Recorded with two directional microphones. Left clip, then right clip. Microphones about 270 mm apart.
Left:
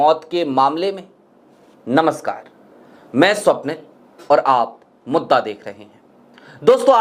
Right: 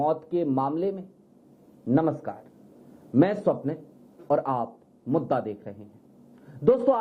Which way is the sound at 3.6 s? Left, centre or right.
Centre.